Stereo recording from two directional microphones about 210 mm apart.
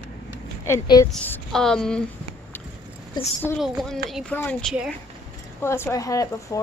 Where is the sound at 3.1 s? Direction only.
20° left (ahead or behind).